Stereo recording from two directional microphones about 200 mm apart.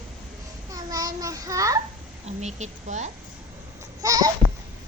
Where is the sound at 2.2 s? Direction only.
35° right (ahead or behind).